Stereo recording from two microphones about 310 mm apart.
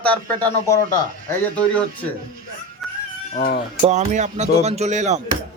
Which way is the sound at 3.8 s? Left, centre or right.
Right.